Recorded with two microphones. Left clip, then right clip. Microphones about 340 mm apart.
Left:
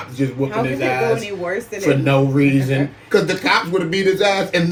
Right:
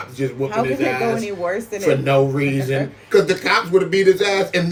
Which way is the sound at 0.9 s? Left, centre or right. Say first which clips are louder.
Left 2 dB; centre.